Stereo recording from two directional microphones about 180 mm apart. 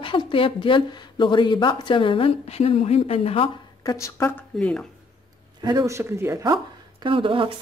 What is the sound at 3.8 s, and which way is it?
Speech, 15° left (ahead or behind).